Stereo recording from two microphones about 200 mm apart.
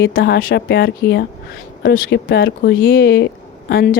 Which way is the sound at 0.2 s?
50° left (ahead or behind).